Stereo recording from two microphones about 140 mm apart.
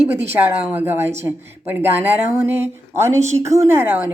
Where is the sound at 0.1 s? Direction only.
15° right (ahead or behind).